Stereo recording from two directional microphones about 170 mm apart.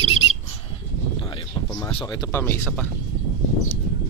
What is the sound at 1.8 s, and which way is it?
Speech, 30° left (ahead or behind).